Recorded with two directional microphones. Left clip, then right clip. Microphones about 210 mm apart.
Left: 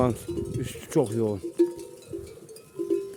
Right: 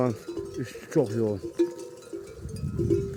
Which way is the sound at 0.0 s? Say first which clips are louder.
Left 2 dB; 20° left (ahead or behind).